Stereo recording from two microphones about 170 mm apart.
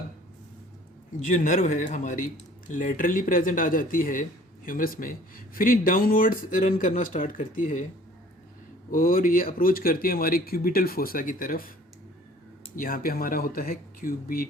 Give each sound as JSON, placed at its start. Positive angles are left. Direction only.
{"t": 1.2, "sound": "speech", "side_deg": 50}
{"t": 8.9, "sound": "speech", "side_deg": 55}
{"t": 12.7, "sound": "speech", "side_deg": 55}